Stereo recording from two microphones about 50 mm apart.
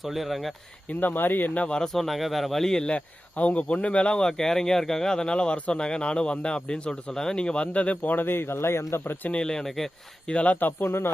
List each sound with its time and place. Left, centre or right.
0.0 s speech: centre
0.9 s speech: left
1.5 s speech: left
1.7 s speech: centre
2.8 s speech: left
9.3 s speech: centre
10.2 s speech: left
10.8 s speech: left